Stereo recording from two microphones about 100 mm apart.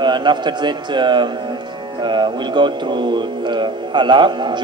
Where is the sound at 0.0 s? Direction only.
50° right (ahead or behind).